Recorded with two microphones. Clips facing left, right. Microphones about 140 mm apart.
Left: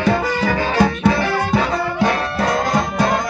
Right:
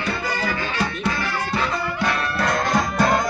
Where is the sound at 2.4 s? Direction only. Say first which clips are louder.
Left 2 dB; 25° left (ahead or behind).